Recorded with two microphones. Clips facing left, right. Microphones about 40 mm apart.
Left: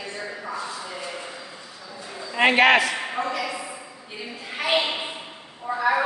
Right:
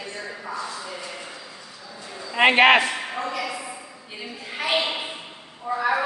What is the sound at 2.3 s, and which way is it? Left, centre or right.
Speech, centre.